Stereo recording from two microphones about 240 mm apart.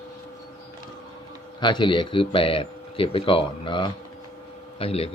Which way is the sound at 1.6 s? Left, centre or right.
Centre.